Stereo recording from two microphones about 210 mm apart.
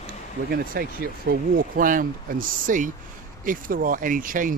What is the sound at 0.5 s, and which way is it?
Speech, 45° right (ahead or behind).